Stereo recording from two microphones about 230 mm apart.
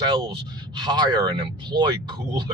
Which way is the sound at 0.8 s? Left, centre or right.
Centre.